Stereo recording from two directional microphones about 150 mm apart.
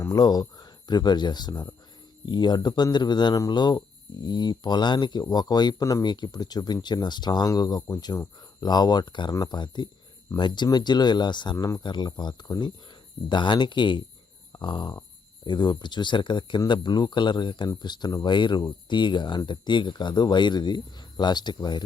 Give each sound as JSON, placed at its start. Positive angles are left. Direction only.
{"t": 0.0, "sound": "speech", "side_deg": 25}
{"t": 14.5, "sound": "a sound", "side_deg": 30}
{"t": 15.4, "sound": "speech", "side_deg": 30}